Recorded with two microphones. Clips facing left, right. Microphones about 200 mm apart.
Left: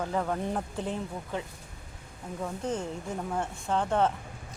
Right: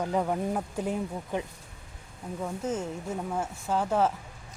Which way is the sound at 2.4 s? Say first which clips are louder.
Right 1 dB; 5° right (ahead or behind).